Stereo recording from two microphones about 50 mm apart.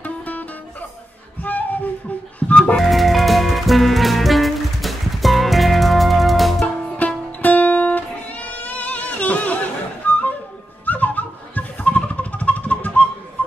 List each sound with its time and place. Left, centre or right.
0.0 s music: left
1.4 s a sound: left
2.5 s music: centre
2.8 s music: centre
7.4 s music: left